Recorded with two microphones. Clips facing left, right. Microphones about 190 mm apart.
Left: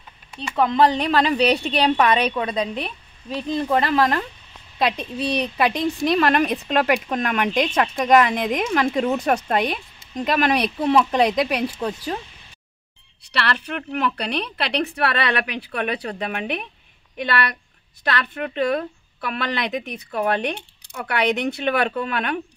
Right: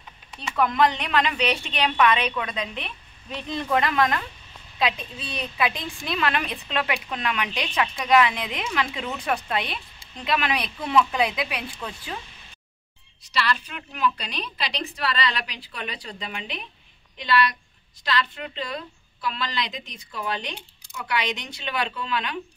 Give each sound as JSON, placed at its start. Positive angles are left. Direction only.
{"t": 0.6, "sound": "a woman's voice", "side_deg": 30}
{"t": 13.3, "sound": "a woman's voice", "side_deg": 65}